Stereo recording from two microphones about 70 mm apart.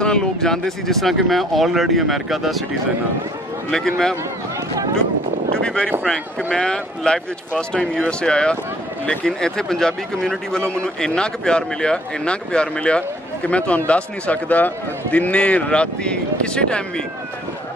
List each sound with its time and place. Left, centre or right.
0.0 s speech: centre
5.6 s speech: centre